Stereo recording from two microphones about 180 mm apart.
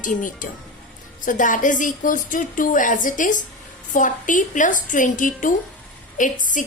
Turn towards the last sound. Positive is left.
turn(degrees=45)  # may be behind; listen again after turning